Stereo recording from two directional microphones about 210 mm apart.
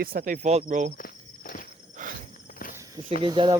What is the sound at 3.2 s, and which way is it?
Speech, 20° right (ahead or behind).